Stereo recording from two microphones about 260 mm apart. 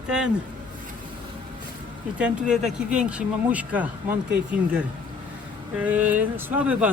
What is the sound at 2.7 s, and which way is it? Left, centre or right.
Speech, right.